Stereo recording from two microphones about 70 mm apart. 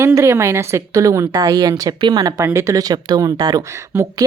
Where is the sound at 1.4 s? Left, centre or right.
Right.